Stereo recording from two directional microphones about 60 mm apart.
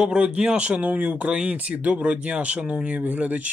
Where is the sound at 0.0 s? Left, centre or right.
Centre.